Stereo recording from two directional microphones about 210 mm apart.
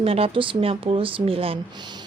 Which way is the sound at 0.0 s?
25° right (ahead or behind).